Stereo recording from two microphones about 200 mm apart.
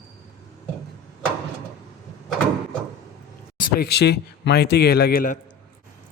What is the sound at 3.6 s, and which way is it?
Speech, 50° left (ahead or behind).